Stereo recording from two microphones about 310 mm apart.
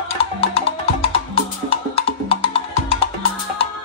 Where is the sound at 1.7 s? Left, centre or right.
Centre.